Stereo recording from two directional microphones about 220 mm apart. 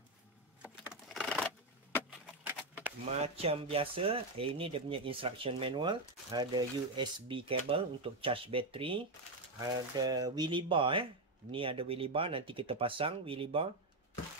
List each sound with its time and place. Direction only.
0.6 s computer keyboard: centre (ahead or behind)
2.4 s a sound: 5° right (ahead or behind)
3.2 s speech: 25° right (ahead or behind)